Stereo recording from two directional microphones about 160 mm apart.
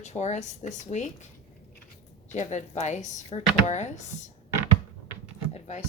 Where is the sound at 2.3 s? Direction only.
50° left (ahead or behind).